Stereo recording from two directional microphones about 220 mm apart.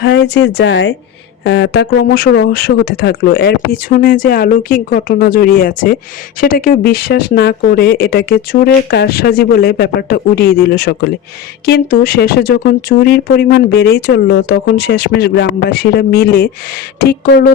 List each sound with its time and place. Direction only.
0.0 s speech: 50° left (ahead or behind)